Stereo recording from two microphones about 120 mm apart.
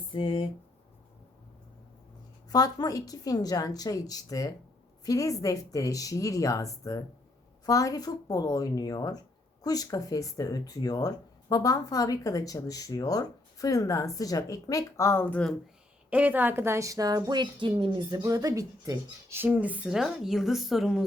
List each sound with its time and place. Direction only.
0.1 s speech: 40° left (ahead or behind)
2.5 s a woman's voice: 30° left (ahead or behind); by 15.5 s 10° left (ahead or behind)
16.0 s a woman's voice: 10° right (ahead or behind)